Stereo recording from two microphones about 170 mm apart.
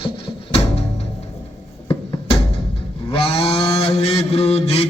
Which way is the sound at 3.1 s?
35° left (ahead or behind).